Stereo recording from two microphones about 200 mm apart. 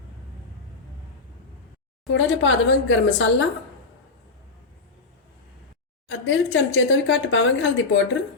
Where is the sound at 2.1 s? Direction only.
70° left (ahead or behind).